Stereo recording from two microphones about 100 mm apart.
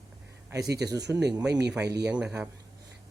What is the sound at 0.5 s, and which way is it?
Speech, 40° right (ahead or behind).